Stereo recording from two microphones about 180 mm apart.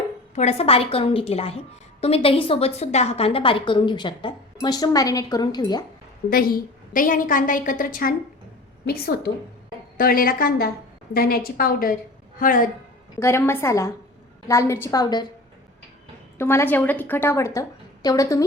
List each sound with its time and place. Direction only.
0.3 s a woman's voice: 35° left (ahead or behind)
6.3 s a woman's voice: 50° left (ahead or behind)
13.1 s a woman's voice: 15° left (ahead or behind)
16.4 s a woman's voice: 15° left (ahead or behind)